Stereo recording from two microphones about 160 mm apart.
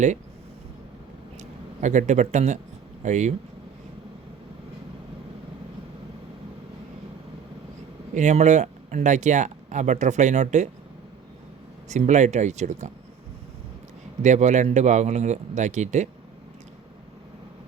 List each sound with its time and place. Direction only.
1.4 s speech: 50° right (ahead or behind)
8.1 s speech: 50° right (ahead or behind)
11.9 s speech: 50° right (ahead or behind)
14.2 s speech: 45° right (ahead or behind)